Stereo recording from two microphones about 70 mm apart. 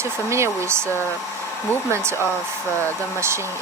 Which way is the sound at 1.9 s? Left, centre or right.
Right.